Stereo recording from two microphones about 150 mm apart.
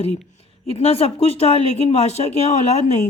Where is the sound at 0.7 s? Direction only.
40° left (ahead or behind).